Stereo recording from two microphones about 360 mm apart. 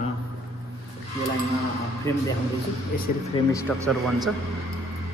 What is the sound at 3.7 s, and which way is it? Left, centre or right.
Speech, centre.